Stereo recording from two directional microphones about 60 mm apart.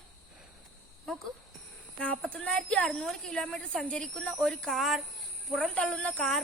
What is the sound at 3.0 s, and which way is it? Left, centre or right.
A woman's voice, centre.